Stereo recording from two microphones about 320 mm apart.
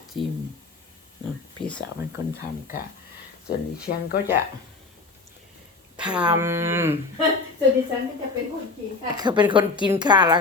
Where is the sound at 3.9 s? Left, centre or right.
Left.